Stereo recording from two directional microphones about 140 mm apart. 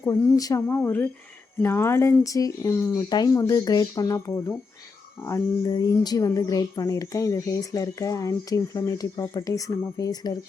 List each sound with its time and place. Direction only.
0.0 s speech: 25° left (ahead or behind)